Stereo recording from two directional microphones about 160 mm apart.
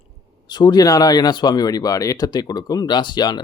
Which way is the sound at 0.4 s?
25° left (ahead or behind).